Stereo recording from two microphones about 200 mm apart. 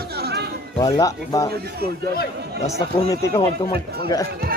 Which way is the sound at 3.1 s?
20° left (ahead or behind).